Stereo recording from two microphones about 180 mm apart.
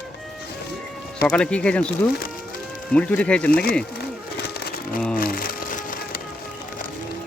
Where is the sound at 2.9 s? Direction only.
5° left (ahead or behind).